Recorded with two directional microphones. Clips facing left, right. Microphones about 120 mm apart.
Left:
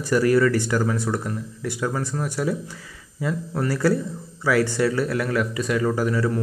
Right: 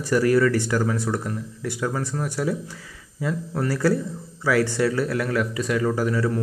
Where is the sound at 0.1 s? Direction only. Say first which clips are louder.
Even; 15° left (ahead or behind).